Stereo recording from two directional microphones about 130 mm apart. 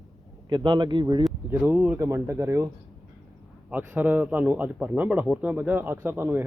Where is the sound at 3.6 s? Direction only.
10° right (ahead or behind).